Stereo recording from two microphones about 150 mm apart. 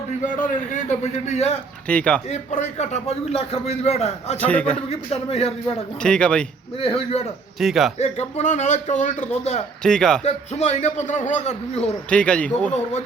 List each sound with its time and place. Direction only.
0.2 s a man's voice: 60° left (ahead or behind)
1.9 s speech: 10° left (ahead or behind)
2.3 s a man's voice: 50° left (ahead or behind)
4.4 s speech: 10° left (ahead or behind)
4.9 s a man's voice: 45° left (ahead or behind)
6.0 s speech: 5° left (ahead or behind)
6.7 s a man's voice: 40° left (ahead or behind)
7.6 s speech: centre (ahead or behind)
7.9 s a man's voice: 45° left (ahead or behind)
9.8 s speech: 5° left (ahead or behind)
10.2 s a man's voice: 50° left (ahead or behind)
12.1 s speech: 5° left (ahead or behind)